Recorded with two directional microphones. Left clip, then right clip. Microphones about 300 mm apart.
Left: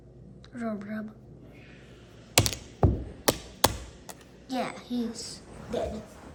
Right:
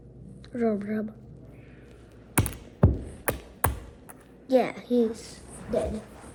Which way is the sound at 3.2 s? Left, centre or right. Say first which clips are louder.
Left 4 dB; left.